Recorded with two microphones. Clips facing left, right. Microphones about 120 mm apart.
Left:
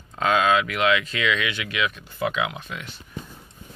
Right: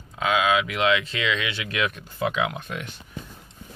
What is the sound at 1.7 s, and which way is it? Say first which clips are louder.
Speech: right 2 dB; 50° right (ahead or behind).